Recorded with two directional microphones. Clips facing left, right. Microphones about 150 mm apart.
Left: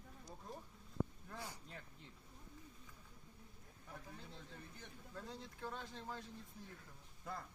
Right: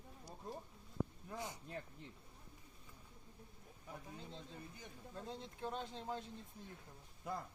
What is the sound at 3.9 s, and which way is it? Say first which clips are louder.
A man's voice: right 3 dB; 20° right (ahead or behind).